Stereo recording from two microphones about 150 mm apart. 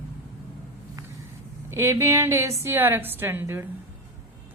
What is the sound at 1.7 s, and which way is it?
A woman's voice, 20° right (ahead or behind).